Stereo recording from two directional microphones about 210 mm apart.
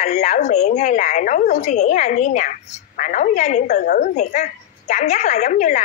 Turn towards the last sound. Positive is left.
turn(degrees=35)  # may be behind; listen again after turning